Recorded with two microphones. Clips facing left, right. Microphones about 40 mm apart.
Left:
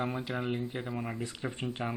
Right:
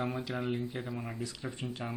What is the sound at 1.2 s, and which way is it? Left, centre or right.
Speech, left.